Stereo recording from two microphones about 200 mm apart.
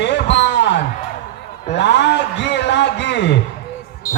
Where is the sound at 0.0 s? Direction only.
60° left (ahead or behind).